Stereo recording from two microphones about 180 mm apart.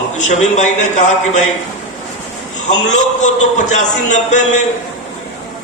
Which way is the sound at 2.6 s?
40° left (ahead or behind).